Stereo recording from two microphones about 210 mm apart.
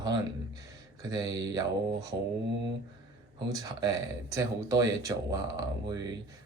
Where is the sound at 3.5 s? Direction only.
15° right (ahead or behind).